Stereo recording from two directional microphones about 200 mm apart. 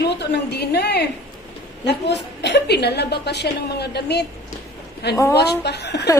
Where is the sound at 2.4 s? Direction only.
55° left (ahead or behind).